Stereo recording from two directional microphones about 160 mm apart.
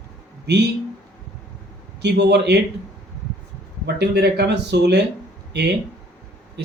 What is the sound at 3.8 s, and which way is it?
Speech, 90° right.